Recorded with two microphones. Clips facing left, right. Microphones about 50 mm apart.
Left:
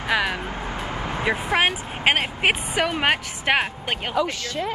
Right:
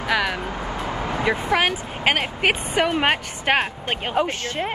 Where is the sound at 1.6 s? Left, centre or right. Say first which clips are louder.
Even; left.